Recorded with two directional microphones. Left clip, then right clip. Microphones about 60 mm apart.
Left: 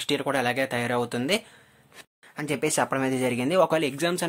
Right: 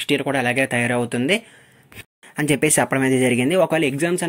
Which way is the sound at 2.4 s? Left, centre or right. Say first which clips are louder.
Right 9 dB; right.